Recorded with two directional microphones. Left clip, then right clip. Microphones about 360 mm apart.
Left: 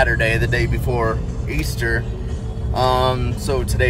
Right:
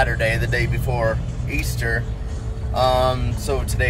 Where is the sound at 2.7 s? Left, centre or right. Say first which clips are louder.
Left 1 dB; centre.